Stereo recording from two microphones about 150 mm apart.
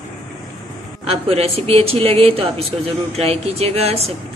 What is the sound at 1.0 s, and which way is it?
Speech, 40° right (ahead or behind).